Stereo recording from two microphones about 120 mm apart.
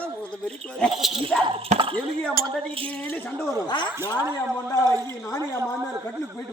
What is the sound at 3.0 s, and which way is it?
Speech, 15° left (ahead or behind).